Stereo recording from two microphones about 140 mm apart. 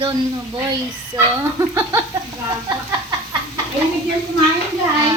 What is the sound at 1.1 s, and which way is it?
Speech, 20° right (ahead or behind).